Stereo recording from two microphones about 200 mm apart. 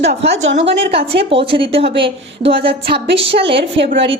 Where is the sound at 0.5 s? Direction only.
30° right (ahead or behind).